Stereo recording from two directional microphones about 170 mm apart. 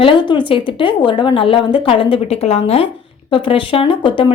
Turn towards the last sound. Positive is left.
turn(degrees=30)  # may be behind; listen again after turning